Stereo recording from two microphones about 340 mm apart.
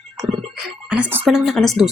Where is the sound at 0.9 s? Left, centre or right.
Centre.